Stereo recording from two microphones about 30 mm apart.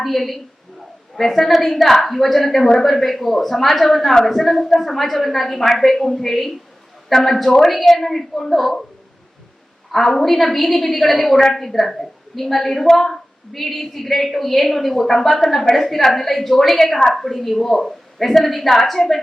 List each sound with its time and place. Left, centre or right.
0.0 s a woman's voice: centre
9.9 s a woman's voice: centre
13.5 s a woman's voice: centre